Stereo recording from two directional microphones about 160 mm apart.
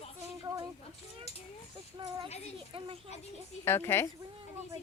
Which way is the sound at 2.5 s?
35° right (ahead or behind).